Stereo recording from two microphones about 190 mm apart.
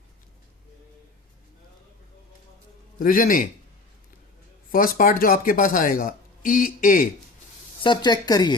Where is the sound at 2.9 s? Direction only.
45° left (ahead or behind).